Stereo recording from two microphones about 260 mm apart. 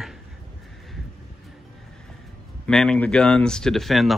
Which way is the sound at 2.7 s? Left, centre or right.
Centre.